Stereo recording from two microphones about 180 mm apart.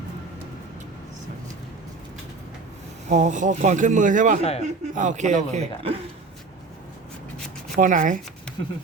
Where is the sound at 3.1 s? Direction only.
45° right (ahead or behind).